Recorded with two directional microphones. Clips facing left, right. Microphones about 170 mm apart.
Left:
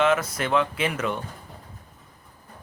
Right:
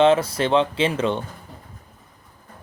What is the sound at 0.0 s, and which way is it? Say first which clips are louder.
Speech: right 6 dB; 30° right (ahead or behind).